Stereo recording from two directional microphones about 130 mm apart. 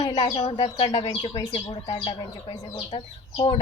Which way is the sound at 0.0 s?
60° left (ahead or behind).